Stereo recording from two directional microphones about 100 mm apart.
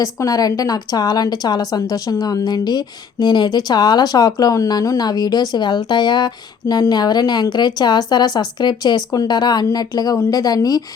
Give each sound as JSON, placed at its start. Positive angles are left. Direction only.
{"t": 0.0, "sound": "a woman's voice", "side_deg": 35}